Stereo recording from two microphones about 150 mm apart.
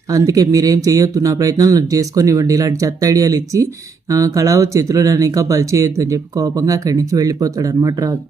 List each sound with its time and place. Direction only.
0.1 s speech: 20° right (ahead or behind)